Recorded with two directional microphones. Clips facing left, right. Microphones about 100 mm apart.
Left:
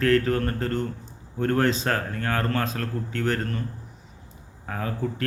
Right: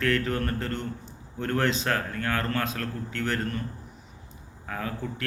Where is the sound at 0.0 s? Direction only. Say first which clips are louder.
Left 5 dB; 35° left (ahead or behind).